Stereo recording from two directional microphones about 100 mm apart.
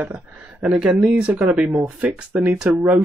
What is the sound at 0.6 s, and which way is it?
Speech, 5° right (ahead or behind).